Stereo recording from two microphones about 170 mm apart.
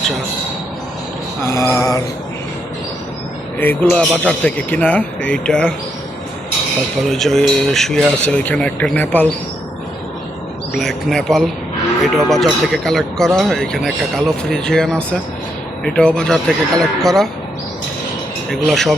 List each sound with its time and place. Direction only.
1.5 s speech: 15° left (ahead or behind)
3.6 s speech: 10° left (ahead or behind)
7.0 s speech: centre (ahead or behind)
10.8 s speech: centre (ahead or behind)
18.6 s speech: centre (ahead or behind)